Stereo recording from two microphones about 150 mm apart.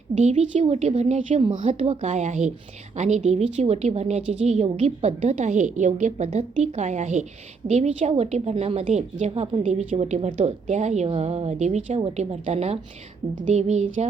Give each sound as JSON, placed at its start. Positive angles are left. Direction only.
{"t": 0.2, "sound": "a woman's voice", "side_deg": -50}
{"t": 13.3, "sound": "a woman's voice", "side_deg": -55}